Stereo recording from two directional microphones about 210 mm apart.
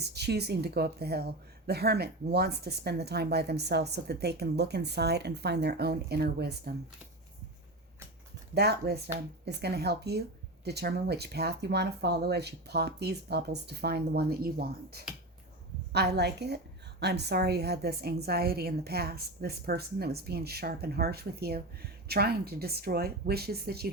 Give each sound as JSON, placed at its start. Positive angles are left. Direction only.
{"t": 0.0, "sound": "a woman's voice", "side_deg": -50}
{"t": 8.5, "sound": "a woman's voice", "side_deg": -50}